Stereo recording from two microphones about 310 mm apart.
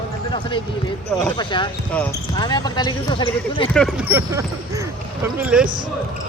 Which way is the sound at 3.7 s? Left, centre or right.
Centre.